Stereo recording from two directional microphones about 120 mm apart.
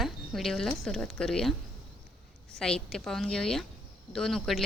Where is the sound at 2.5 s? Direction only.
5° left (ahead or behind).